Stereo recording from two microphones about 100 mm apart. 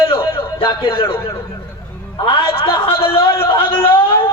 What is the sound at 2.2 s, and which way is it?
A man's voice, 65° left (ahead or behind).